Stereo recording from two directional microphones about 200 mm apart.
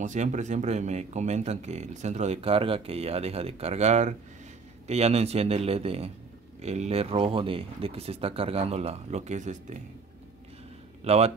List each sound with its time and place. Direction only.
0.0 s speech: 35° right (ahead or behind)
11.1 s speech: 30° right (ahead or behind)